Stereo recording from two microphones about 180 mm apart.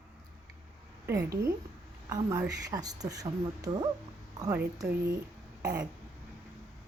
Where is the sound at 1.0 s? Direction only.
15° right (ahead or behind).